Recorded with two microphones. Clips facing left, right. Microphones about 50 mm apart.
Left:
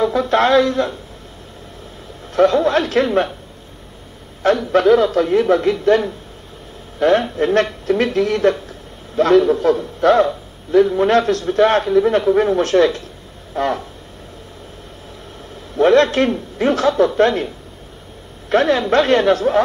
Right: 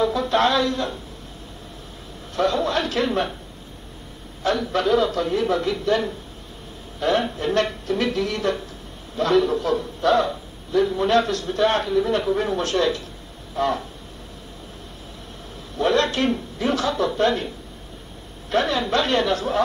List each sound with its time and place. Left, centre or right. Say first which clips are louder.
0.0 s a man's voice: left 4 dB; left
2.3 s a man's voice: left 8 dB; left
4.4 s a man's voice: left 7 dB; left
15.7 s a man's voice: left 8 dB; left
18.5 s a man's voice: left 7 dB; left